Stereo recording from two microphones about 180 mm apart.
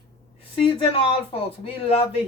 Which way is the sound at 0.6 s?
30° left (ahead or behind).